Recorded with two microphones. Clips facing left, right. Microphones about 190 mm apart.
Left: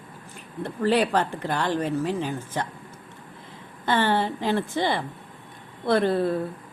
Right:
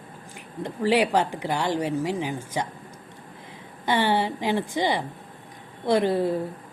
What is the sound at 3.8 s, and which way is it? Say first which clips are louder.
A woman's voice: even; 15° right (ahead or behind).